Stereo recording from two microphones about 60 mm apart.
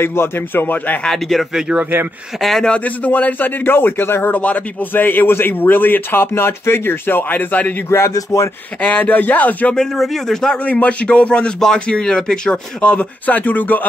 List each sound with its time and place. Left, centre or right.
0.0 s a man's voice: left
1.0 s a man's voice: centre
1.8 s speech: right
2.6 s a man's voice: left
7.9 s speech: left
8.8 s speech: left
9.8 s a man's voice: centre
10.6 s speech: left
12.8 s speech: left